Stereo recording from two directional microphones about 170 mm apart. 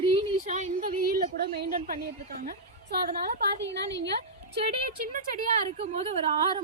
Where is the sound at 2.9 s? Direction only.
65° right (ahead or behind).